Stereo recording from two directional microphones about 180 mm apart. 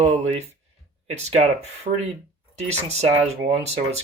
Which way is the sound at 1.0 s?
35° right (ahead or behind).